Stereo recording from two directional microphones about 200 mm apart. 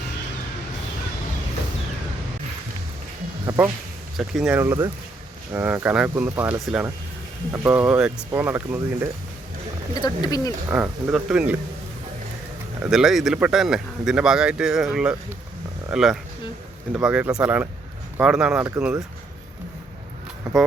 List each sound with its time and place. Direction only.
3.4 s a sound: 15° right (ahead or behind)
4.2 s speech: 5° right (ahead or behind)
9.9 s speech: 20° left (ahead or behind)
10.7 s speech: 10° right (ahead or behind)
12.8 s speech: centre (ahead or behind)
20.4 s speech: centre (ahead or behind)